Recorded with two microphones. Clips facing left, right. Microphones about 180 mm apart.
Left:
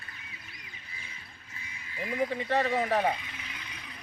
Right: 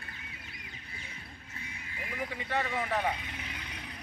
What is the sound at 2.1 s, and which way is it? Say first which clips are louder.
Speech: left 6 dB; 30° left (ahead or behind).